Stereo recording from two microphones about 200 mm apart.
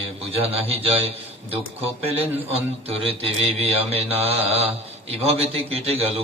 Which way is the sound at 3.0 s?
30° right (ahead or behind).